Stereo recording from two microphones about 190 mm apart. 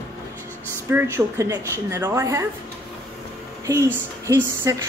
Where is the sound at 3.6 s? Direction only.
15° right (ahead or behind).